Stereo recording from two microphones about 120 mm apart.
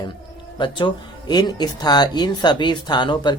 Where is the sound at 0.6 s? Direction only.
40° left (ahead or behind).